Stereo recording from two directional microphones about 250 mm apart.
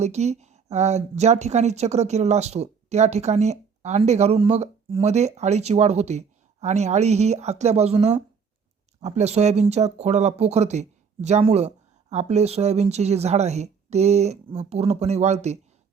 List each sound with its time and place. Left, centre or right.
0.0 s a woman's voice: right